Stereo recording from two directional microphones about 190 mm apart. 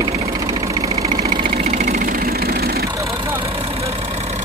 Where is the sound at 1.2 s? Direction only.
35° right (ahead or behind).